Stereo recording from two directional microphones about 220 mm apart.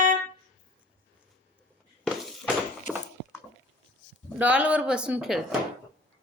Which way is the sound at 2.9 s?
35° left (ahead or behind).